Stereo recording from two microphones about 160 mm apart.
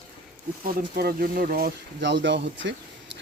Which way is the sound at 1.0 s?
70° right (ahead or behind).